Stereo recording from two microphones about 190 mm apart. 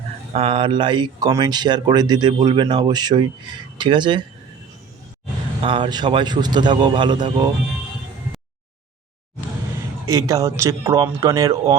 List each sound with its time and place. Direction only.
0.3 s speech: 30° right (ahead or behind)
5.6 s speech: 25° right (ahead or behind)
10.1 s speech: 15° right (ahead or behind)